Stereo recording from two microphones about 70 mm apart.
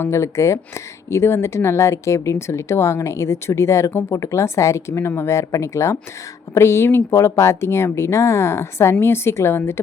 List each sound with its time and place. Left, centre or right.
0.0 s speech: left